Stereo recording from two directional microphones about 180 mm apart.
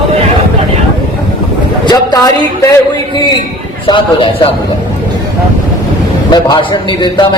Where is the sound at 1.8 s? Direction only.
20° left (ahead or behind).